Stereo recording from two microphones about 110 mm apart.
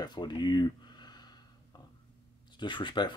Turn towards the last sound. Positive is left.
turn(degrees=45)  # may be behind; listen again after turning